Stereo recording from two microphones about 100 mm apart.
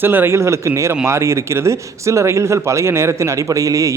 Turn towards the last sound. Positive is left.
turn(degrees=-35)  # may be behind; listen again after turning